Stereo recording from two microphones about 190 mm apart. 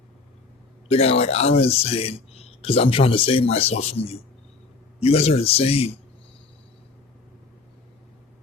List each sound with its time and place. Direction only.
0.9 s speech: 30° left (ahead or behind)